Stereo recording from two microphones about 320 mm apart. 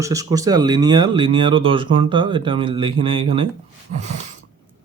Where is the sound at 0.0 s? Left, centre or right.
Centre.